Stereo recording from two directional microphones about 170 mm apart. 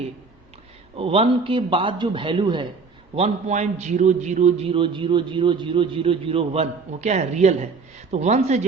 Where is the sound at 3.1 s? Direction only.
40° right (ahead or behind).